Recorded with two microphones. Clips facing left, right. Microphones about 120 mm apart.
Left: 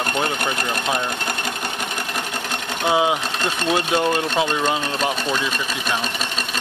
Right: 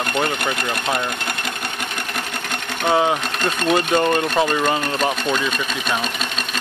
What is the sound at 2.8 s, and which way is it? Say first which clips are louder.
Speech: right 1 dB; 5° left (ahead or behind).